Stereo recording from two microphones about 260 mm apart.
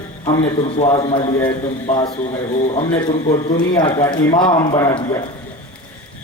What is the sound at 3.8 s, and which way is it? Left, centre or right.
A man's voice, centre.